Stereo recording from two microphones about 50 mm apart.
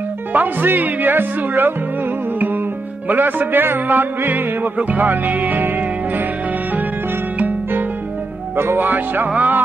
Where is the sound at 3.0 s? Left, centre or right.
Right.